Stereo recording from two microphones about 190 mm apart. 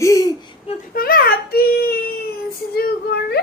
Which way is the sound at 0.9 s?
50° left (ahead or behind).